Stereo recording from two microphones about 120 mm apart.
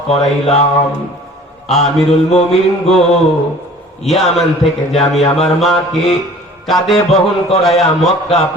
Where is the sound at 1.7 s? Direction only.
Centre (ahead or behind).